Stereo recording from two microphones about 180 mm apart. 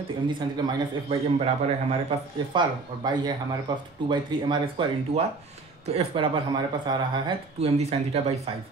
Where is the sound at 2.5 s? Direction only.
25° right (ahead or behind).